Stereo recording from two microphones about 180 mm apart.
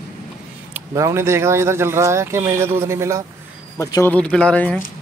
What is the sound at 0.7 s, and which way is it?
Speech, 15° right (ahead or behind).